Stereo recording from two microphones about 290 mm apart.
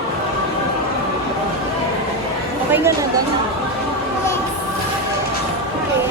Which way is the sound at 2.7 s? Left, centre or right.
Centre.